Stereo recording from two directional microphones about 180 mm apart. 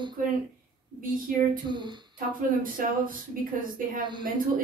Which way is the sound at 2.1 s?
50° right (ahead or behind).